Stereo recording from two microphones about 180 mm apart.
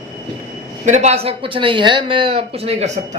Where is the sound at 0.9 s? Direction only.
40° right (ahead or behind).